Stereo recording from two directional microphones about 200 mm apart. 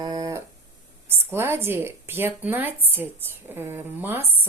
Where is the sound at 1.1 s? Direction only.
10° right (ahead or behind).